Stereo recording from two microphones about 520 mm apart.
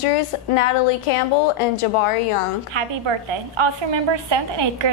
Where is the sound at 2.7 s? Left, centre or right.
Right.